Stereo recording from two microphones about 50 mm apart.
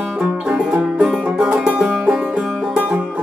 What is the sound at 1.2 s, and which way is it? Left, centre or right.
Music, right.